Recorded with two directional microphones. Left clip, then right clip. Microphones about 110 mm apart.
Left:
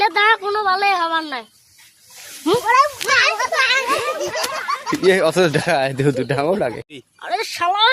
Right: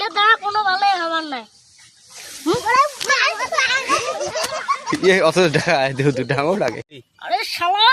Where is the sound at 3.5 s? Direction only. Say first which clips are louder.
Left 1 dB; 65° right (ahead or behind).